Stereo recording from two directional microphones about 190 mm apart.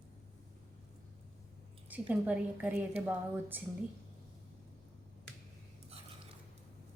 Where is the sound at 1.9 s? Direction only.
10° right (ahead or behind).